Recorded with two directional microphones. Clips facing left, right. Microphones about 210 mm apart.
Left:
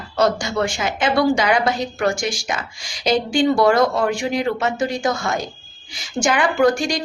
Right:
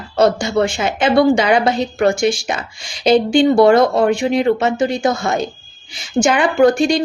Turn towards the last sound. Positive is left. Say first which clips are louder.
# right 5 dB
turn(degrees=-25)  # may be behind; listen again after turning